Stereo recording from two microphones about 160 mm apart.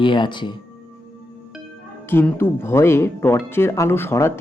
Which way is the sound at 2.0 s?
15° left (ahead or behind).